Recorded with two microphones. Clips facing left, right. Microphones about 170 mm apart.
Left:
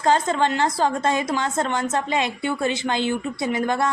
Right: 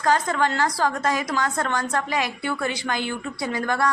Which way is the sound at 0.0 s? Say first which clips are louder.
Left 2 dB; 25° left (ahead or behind).